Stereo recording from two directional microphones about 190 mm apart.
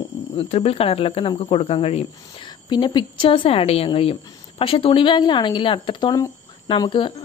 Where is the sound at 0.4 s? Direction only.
30° left (ahead or behind).